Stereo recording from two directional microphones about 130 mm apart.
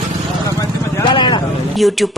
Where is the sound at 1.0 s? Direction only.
40° left (ahead or behind).